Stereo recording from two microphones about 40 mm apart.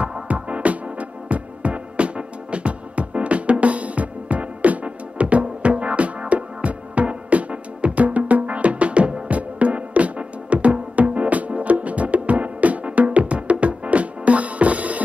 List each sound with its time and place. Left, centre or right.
0.0 s music: right